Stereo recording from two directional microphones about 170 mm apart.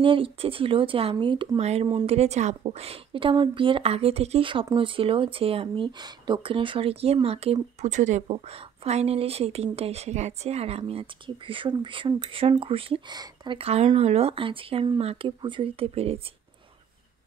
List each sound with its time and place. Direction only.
0.0 s a woman's voice: 30° right (ahead or behind)